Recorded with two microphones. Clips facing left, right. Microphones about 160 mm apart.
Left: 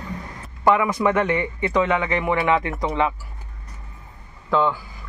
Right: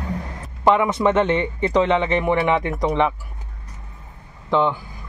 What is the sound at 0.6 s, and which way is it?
A man's voice, 20° right (ahead or behind).